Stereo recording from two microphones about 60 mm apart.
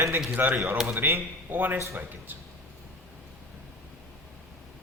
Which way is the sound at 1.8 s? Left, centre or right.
Right.